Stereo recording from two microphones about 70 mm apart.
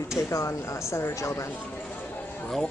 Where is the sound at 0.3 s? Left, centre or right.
Left.